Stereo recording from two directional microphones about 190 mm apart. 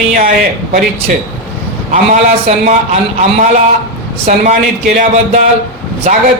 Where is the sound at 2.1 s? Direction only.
35° right (ahead or behind).